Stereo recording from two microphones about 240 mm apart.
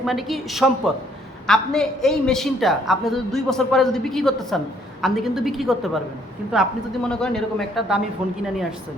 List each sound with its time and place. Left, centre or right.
0.0 s a woman's voice: centre